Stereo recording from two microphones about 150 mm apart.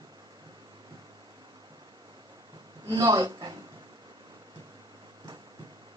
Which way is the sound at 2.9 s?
25° right (ahead or behind).